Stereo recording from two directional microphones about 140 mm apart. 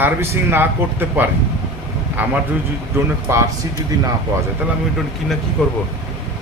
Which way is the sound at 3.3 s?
20° right (ahead or behind).